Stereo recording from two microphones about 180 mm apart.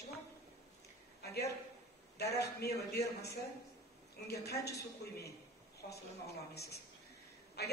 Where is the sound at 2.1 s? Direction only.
65° left (ahead or behind).